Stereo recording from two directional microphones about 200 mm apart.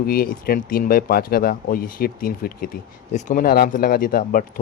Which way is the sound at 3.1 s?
35° left (ahead or behind).